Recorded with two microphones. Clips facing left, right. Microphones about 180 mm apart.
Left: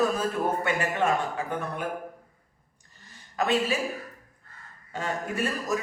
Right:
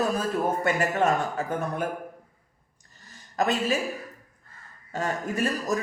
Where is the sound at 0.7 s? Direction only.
40° right (ahead or behind).